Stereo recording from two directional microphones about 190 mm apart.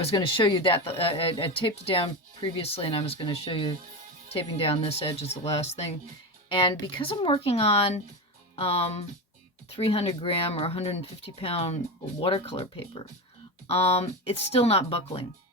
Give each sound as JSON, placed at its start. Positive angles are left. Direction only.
{"t": 0.2, "sound": "speech", "side_deg": 25}